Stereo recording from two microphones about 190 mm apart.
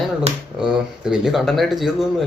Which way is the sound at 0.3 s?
35° right (ahead or behind).